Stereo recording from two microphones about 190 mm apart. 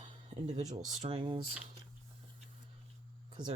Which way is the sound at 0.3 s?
40° right (ahead or behind).